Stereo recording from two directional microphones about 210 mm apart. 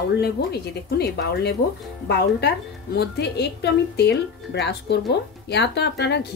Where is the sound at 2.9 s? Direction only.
50° left (ahead or behind).